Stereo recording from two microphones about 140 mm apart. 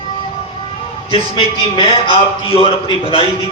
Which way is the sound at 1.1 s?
35° left (ahead or behind).